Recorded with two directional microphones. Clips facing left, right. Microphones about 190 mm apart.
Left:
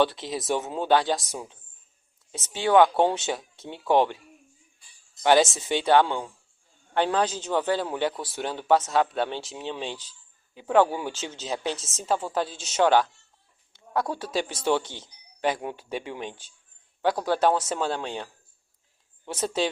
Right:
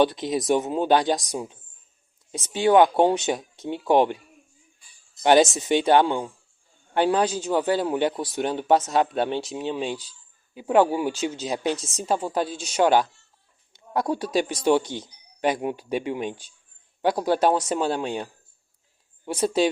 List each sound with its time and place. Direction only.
0.0 s a man's voice: 15° right (ahead or behind)
5.2 s a man's voice: 20° right (ahead or behind)